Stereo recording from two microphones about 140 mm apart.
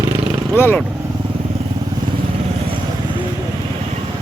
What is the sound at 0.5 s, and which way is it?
Speech, 15° left (ahead or behind).